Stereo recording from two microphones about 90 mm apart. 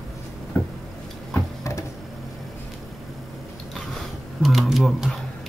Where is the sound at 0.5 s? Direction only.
20° left (ahead or behind).